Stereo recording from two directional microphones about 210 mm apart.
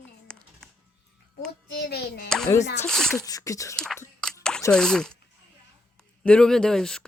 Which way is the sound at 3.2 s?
15° left (ahead or behind).